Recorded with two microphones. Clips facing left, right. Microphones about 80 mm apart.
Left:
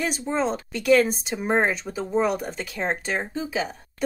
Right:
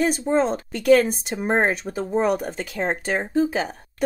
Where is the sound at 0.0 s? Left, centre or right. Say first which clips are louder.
Right 5 dB; right.